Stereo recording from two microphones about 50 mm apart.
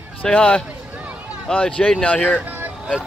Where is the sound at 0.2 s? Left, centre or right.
Left.